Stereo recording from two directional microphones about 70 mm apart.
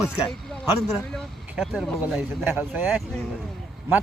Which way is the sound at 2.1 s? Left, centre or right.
Right.